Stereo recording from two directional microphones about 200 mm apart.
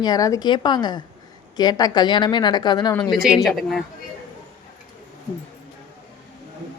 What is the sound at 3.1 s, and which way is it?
Speech, centre (ahead or behind).